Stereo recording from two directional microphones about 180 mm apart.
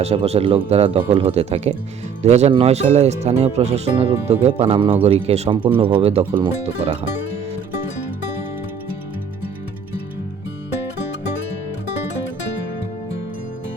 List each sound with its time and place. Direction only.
0.0 s speech: 35° right (ahead or behind)